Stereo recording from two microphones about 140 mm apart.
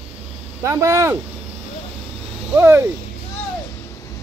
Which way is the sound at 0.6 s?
20° right (ahead or behind).